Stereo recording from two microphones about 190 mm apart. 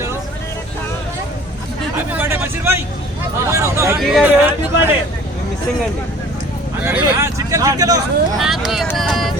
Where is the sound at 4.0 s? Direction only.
Centre (ahead or behind).